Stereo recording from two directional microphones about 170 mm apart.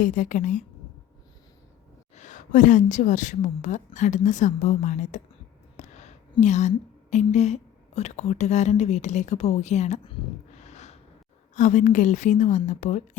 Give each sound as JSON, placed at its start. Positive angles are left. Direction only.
{"t": 0.0, "sound": "a woman's voice", "side_deg": 50}
{"t": 2.1, "sound": "a woman's voice", "side_deg": 45}
{"t": 5.7, "sound": "a sound", "side_deg": 45}
{"t": 6.4, "sound": "a woman's voice", "side_deg": 45}
{"t": 10.1, "sound": "snort", "side_deg": 40}
{"t": 11.5, "sound": "a woman's voice", "side_deg": 45}